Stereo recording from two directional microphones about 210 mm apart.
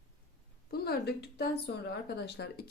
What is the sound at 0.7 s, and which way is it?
A woman's voice, 50° left (ahead or behind).